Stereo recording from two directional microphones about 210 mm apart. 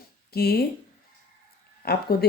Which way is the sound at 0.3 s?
50° left (ahead or behind).